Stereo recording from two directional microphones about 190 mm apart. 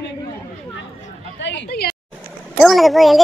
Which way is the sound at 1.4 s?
70° left (ahead or behind).